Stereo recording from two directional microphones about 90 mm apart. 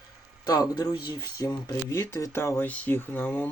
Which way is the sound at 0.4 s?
45° left (ahead or behind).